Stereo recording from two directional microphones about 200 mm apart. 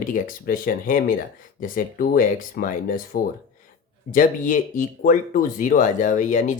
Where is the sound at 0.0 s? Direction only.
45° left (ahead or behind).